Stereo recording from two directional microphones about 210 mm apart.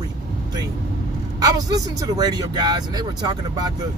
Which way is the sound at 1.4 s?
15° right (ahead or behind).